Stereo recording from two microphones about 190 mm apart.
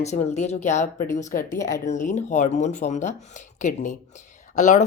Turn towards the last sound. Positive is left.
turn(degrees=40)  # may be behind; listen again after turning